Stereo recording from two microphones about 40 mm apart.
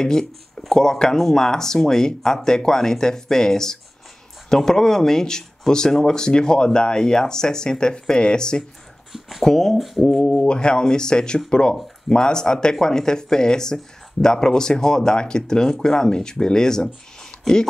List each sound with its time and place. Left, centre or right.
0.0 s speech: centre
9.4 s speech: centre
10.3 s speech: left